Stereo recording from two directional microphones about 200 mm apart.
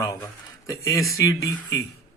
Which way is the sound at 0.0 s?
15° left (ahead or behind).